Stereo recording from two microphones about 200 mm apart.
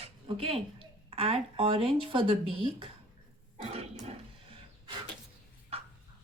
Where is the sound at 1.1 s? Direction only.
30° right (ahead or behind).